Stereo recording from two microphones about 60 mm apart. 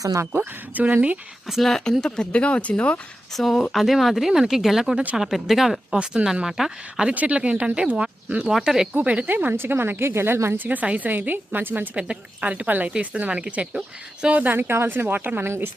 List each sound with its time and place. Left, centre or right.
0.0 s speech: right
0.3 s speech: right
1.6 s speech: centre
3.3 s speech: centre
7.1 s speech: right
8.4 s speech: centre
9.0 s speech: right
10.6 s speech: right
11.9 s speech: right
14.4 s speech: right
15.4 s a woman's voice: right